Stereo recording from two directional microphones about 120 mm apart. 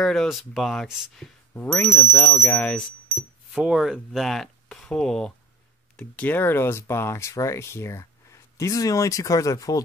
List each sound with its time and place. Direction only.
0.0 s speech: 5° left (ahead or behind)
3.1 s speech: 5° right (ahead or behind); by 9.8 s 30° left (ahead or behind)